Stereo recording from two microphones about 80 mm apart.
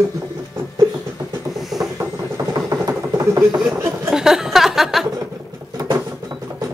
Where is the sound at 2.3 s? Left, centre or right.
Right.